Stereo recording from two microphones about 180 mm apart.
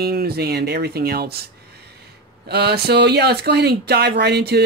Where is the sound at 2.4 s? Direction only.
65° right (ahead or behind).